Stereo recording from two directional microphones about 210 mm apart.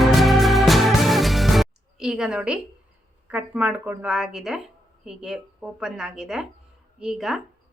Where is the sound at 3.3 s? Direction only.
5° right (ahead or behind).